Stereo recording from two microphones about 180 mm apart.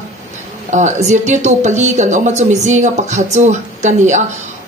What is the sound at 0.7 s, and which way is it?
A woman's voice, 40° right (ahead or behind).